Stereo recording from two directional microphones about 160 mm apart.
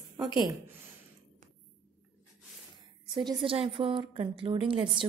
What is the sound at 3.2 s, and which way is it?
A woman's voice, 30° right (ahead or behind).